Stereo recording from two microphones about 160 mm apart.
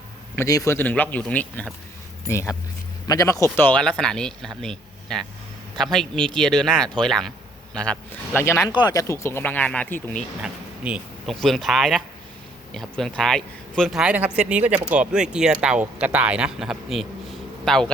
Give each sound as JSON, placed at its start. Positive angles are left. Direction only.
{"t": 0.3, "sound": "speech", "side_deg": 20}
{"t": 8.7, "sound": "speech", "side_deg": 25}
{"t": 10.4, "sound": "speech", "side_deg": -5}